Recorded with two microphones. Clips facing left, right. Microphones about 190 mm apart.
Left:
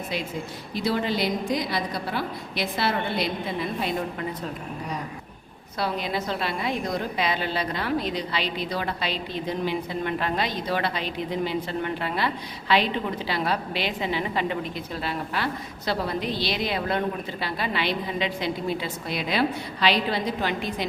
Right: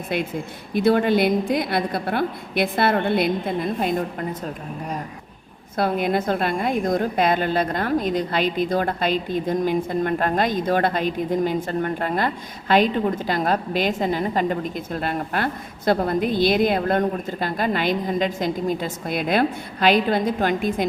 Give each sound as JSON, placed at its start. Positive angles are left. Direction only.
{"t": 0.7, "sound": "a woman's voice", "side_deg": -55}
{"t": 5.7, "sound": "a woman's voice", "side_deg": -50}